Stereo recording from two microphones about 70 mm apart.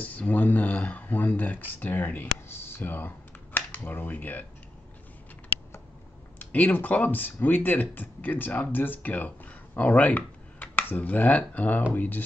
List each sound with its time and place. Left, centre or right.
0.0 s speech: left
6.4 s speech: left